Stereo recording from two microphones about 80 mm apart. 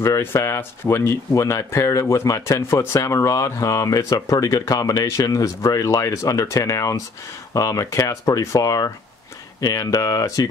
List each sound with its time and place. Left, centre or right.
0.0 s speech: left